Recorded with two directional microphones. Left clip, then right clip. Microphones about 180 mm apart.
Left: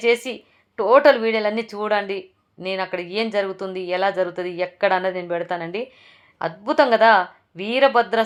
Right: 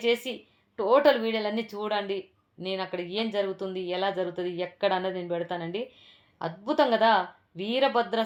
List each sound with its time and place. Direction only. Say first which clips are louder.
0.0 s a woman's voice: left 7 dB; 20° left (ahead or behind)